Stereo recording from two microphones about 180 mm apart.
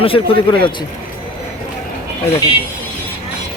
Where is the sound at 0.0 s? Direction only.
30° left (ahead or behind).